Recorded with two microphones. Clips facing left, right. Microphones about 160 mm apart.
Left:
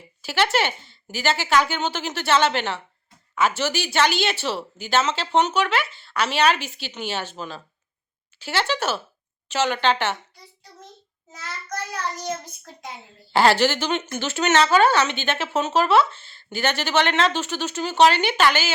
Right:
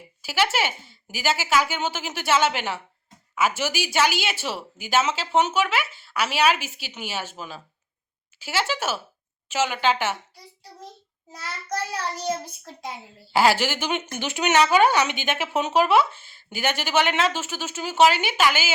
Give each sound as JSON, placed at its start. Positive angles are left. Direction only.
{"t": 0.2, "sound": "speech", "side_deg": -5}
{"t": 11.3, "sound": "child singing", "side_deg": -35}
{"t": 13.3, "sound": "speech", "side_deg": -10}